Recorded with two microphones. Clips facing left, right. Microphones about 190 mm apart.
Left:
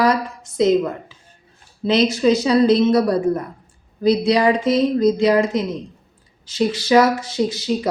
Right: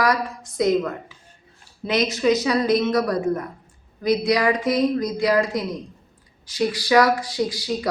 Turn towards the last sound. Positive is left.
turn(degrees=25)  # may be behind; listen again after turning